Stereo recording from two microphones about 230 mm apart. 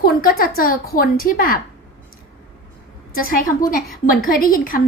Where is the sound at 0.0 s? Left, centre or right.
Left.